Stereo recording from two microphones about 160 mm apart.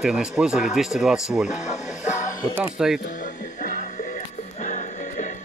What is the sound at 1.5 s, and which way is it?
Speech, 45° left (ahead or behind).